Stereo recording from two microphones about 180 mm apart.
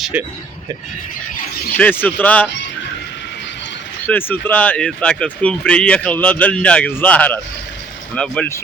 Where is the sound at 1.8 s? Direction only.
10° left (ahead or behind).